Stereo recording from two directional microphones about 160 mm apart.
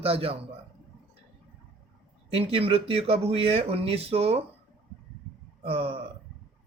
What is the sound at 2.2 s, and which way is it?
Speech, 35° right (ahead or behind).